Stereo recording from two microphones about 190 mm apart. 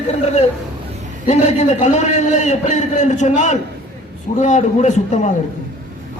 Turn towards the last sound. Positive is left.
turn(degrees=40)  # may be behind; listen again after turning